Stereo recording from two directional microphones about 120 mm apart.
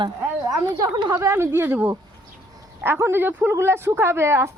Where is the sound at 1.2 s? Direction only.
20° right (ahead or behind).